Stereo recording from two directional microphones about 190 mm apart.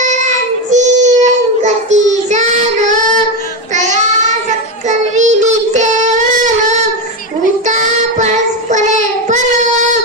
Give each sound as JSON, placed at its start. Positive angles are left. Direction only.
{"t": 0.0, "sound": "child singing", "side_deg": -40}
{"t": 8.7, "sound": "child singing", "side_deg": -40}